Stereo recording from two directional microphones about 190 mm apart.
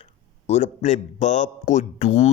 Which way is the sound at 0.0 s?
35° left (ahead or behind).